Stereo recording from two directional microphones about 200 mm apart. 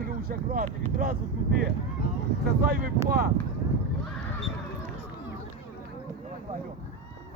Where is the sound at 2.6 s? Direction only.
50° right (ahead or behind).